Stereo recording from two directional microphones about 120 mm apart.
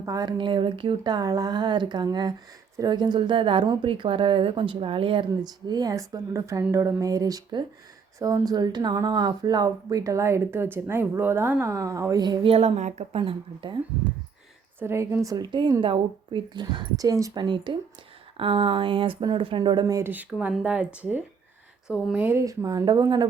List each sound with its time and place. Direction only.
0.0 s a woman's voice: 30° right (ahead or behind); by 5.2 s 45° right (ahead or behind)
5.4 s speech: 35° right (ahead or behind)
12.5 s a woman's voice: 65° right (ahead or behind)
13.1 s a woman's voice: 50° right (ahead or behind)
14.8 s speech: 20° right (ahead or behind)
15.4 s a woman's voice: 40° right (ahead or behind)
20.0 s speech: 15° right (ahead or behind)
22.4 s speech: 30° right (ahead or behind)